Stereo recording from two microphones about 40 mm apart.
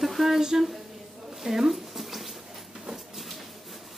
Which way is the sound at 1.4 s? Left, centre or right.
Centre.